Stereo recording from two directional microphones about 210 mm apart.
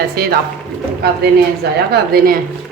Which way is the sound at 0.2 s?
45° right (ahead or behind).